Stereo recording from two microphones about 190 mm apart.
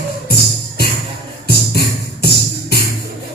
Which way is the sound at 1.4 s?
55° left (ahead or behind).